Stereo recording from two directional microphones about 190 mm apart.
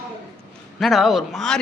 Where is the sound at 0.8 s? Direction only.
Centre (ahead or behind).